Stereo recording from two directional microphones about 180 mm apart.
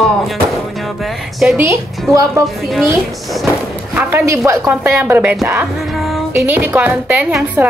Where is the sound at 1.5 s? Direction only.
15° right (ahead or behind).